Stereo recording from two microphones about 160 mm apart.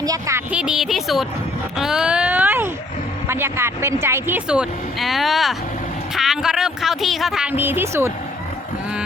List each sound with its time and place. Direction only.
0.0 s speech: 20° right (ahead or behind)
0.5 s a man's voice: 5° right (ahead or behind)